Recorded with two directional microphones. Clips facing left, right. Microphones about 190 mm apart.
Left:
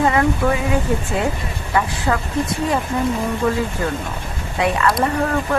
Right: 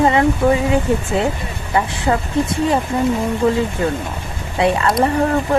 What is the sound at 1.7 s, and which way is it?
Speech, 25° right (ahead or behind).